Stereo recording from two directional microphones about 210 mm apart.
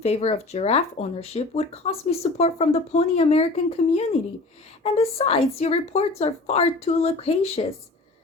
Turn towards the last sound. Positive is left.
turn(degrees=30)  # may be behind; listen again after turning